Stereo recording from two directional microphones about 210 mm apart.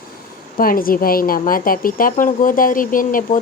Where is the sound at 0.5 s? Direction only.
45° left (ahead or behind).